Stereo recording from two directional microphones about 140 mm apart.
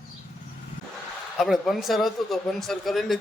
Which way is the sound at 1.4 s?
Centre (ahead or behind).